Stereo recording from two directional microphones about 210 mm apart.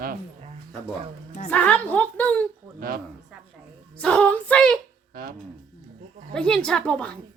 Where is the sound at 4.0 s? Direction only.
5° left (ahead or behind).